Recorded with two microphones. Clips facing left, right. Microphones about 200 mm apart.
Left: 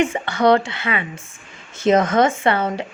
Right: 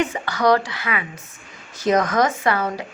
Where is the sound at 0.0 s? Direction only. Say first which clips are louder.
Left 3 dB; 25° left (ahead or behind).